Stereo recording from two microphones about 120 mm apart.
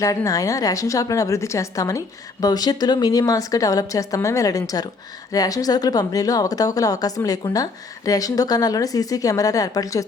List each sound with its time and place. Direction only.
0.0 s a woman's voice: 30° left (ahead or behind)